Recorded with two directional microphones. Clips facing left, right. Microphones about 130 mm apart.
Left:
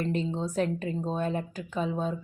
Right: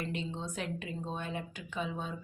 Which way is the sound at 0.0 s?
40° left (ahead or behind).